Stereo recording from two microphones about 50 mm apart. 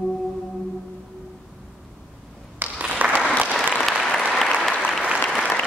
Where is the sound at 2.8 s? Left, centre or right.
Right.